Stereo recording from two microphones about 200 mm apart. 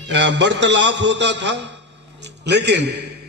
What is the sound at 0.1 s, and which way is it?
A man's voice, 60° right (ahead or behind).